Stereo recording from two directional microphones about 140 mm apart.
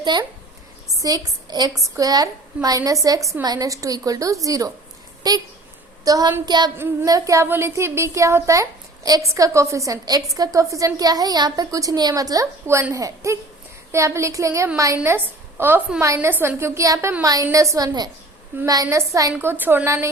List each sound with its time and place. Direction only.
0.0 s a child's voice: 30° right (ahead or behind)
6.4 s child singing: 30° right (ahead or behind)
6.7 s a woman's voice: 25° right (ahead or behind)